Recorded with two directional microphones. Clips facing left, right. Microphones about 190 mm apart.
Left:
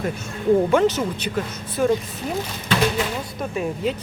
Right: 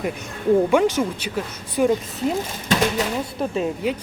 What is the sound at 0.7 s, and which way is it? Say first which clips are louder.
Speech: even; 10° right (ahead or behind).